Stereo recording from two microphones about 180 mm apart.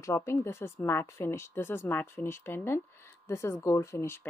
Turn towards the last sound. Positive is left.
turn(degrees=15)  # may be behind; listen again after turning